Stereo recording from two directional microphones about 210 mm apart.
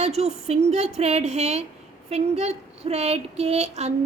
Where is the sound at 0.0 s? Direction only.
30° right (ahead or behind).